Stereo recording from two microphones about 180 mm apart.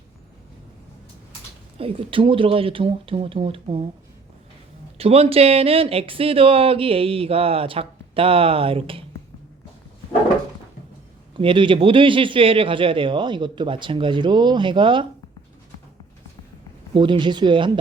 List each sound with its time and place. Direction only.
1.8 s speech: 30° right (ahead or behind)
4.9 s speech: 35° right (ahead or behind)
11.3 s speech: 30° right (ahead or behind)
16.9 s speech: 25° right (ahead or behind)